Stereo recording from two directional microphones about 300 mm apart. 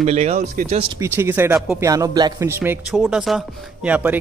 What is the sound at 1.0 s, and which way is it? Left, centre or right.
A man's voice, centre.